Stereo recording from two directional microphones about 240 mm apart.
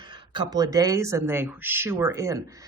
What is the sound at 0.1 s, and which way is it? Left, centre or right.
Speech, centre.